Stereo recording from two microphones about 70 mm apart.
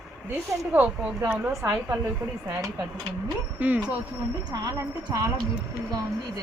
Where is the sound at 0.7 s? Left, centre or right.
Right.